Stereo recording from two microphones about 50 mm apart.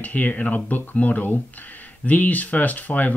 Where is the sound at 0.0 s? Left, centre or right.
Left.